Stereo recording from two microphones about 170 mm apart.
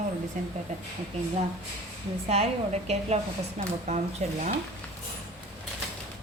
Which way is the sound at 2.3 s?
40° right (ahead or behind).